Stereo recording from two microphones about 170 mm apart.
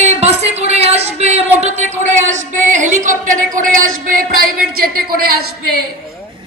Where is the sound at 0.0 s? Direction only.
40° right (ahead or behind).